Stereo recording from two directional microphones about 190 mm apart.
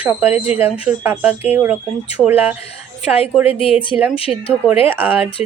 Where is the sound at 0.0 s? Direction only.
10° right (ahead or behind).